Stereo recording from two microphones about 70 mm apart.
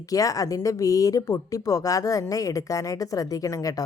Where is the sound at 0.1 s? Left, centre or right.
Left.